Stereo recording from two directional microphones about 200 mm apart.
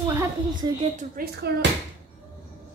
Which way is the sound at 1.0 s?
50° right (ahead or behind).